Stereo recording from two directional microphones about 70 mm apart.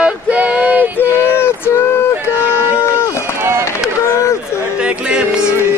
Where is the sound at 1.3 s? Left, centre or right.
Left.